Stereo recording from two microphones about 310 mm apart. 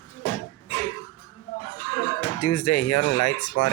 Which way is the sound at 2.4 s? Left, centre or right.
Left.